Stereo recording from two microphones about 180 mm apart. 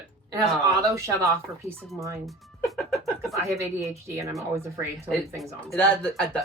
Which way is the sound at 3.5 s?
15° right (ahead or behind).